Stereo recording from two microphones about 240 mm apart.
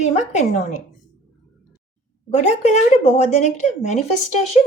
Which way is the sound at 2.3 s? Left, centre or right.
Left.